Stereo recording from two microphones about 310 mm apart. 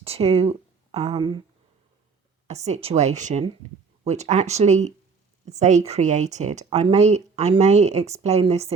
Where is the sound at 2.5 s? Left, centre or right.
Right.